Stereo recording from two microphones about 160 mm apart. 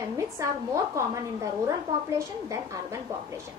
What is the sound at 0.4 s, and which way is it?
Speech, 20° right (ahead or behind).